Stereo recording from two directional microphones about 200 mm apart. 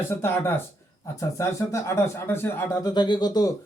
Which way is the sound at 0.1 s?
10° left (ahead or behind).